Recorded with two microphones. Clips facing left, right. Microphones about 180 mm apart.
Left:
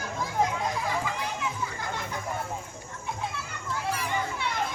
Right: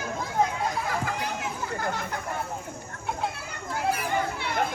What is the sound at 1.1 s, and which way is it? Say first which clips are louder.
Children playing: right 1 dB; 55° right (ahead or behind).